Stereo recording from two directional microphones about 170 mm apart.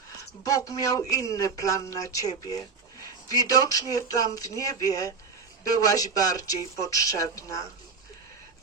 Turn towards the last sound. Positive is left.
turn(degrees=20)  # may be behind; listen again after turning